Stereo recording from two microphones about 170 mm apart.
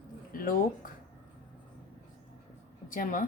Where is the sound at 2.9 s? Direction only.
50° left (ahead or behind).